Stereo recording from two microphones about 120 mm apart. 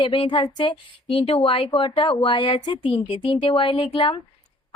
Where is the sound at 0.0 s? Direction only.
40° left (ahead or behind).